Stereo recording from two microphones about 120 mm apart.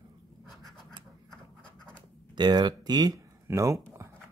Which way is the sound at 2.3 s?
35° right (ahead or behind).